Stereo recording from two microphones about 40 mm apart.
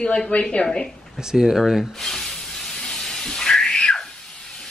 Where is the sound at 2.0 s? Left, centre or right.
Centre.